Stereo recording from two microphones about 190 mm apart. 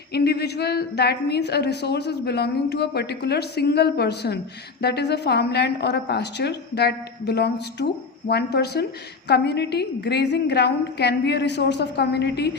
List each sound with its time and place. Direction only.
0.1 s a woman's voice: 60° left (ahead or behind)